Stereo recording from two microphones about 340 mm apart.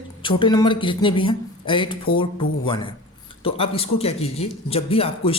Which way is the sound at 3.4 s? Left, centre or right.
Centre.